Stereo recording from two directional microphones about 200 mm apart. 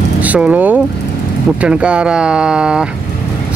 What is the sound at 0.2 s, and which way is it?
Speech, 5° right (ahead or behind).